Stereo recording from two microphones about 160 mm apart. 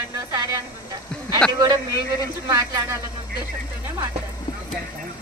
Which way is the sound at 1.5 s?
25° right (ahead or behind).